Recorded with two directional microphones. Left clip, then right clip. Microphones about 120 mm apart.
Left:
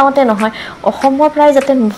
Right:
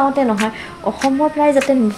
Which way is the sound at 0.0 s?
20° left (ahead or behind).